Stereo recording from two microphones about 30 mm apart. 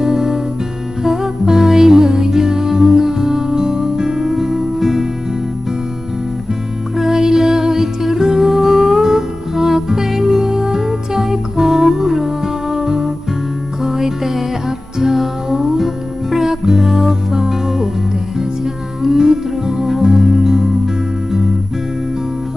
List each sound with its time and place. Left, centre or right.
0.0 s music: centre
6.9 s music: centre
19.2 s music: centre